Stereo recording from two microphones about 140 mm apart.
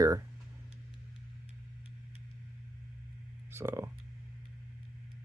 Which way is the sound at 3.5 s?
20° right (ahead or behind).